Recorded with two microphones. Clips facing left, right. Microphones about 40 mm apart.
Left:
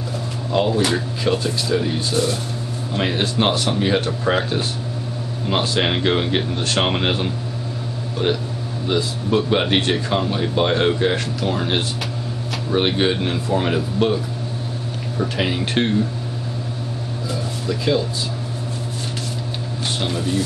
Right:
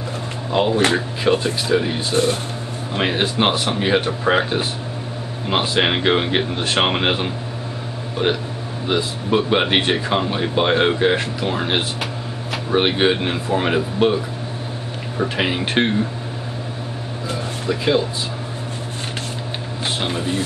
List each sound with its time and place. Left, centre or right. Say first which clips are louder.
0.5 s speech: right 2 dB; right
17.3 s vehicle: right 2 dB; right
20.0 s speech: left 1 dB; right